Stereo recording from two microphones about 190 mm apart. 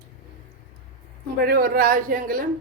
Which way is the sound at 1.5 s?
50° right (ahead or behind).